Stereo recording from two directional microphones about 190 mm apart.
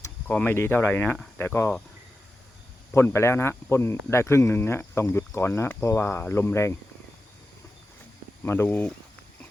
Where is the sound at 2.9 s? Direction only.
15° left (ahead or behind).